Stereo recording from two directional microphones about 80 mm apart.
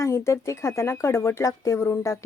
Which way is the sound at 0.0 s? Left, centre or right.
Left.